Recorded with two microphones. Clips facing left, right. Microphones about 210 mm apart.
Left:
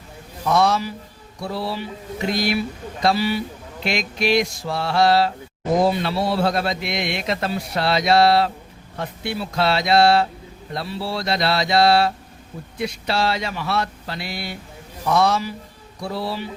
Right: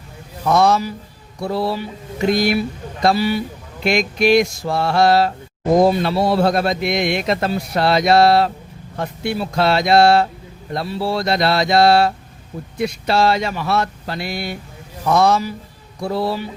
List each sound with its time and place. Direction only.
0.5 s a man's voice: 45° right (ahead or behind)